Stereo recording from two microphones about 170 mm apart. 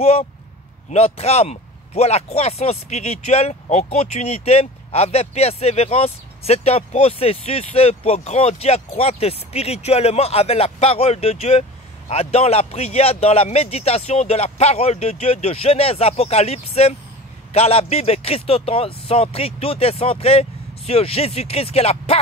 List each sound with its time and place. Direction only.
0.0 s speech: 35° left (ahead or behind)